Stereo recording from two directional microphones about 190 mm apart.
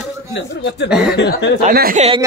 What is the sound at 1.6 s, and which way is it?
Speech, 45° right (ahead or behind).